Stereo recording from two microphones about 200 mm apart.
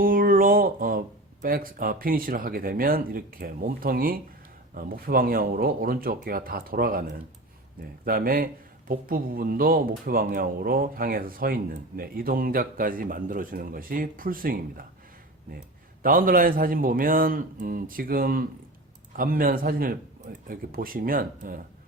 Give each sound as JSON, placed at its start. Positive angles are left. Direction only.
{"t": 0.0, "sound": "speech", "side_deg": -45}
{"t": 8.0, "sound": "speech", "side_deg": -45}
{"t": 16.0, "sound": "speech", "side_deg": -45}